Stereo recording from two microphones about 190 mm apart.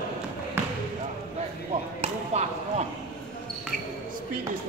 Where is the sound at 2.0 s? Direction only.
35° right (ahead or behind).